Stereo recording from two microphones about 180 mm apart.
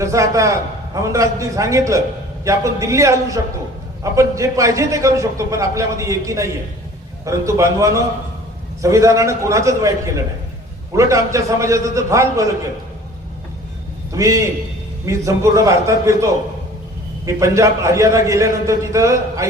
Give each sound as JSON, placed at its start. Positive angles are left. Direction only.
{"t": 0.0, "sound": "a man's voice", "side_deg": -15}
{"t": 14.1, "sound": "a man's voice", "side_deg": -15}